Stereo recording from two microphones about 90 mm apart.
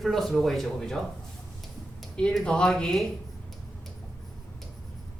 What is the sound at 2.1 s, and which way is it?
Speech, 10° left (ahead or behind).